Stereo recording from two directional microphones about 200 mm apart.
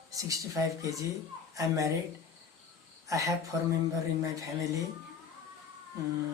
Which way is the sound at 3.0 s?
15° right (ahead or behind).